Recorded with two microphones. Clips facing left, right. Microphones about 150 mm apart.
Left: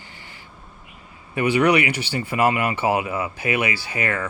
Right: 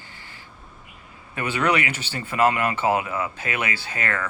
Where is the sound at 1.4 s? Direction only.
15° left (ahead or behind).